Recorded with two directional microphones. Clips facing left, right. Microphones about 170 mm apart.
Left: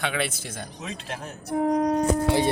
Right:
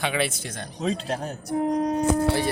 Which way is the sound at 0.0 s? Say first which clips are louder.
Right 2 dB; centre (ahead or behind).